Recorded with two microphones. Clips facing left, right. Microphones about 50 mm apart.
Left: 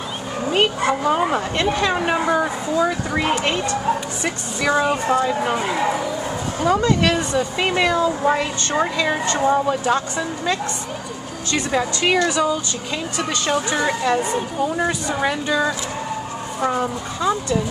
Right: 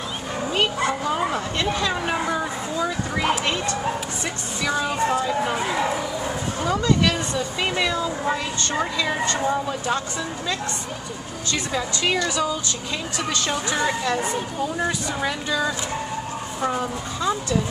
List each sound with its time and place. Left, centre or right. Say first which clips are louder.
0.5 s a woman's voice: left 4 dB; left
6.8 s a woman's voice: left 3 dB; left
13.2 s speech: left 4 dB; centre